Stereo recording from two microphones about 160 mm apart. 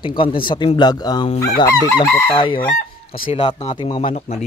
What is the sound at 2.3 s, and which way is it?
Speech, 30° left (ahead or behind).